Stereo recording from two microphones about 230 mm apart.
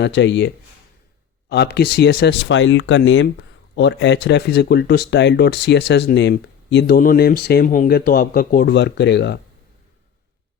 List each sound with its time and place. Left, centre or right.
0.0 s speech: left